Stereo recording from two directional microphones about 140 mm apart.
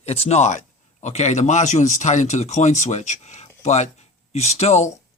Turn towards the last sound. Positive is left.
turn(degrees=55)  # may be behind; listen again after turning